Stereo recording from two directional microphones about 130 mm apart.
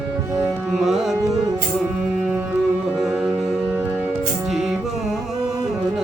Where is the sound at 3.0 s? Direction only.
5° right (ahead or behind).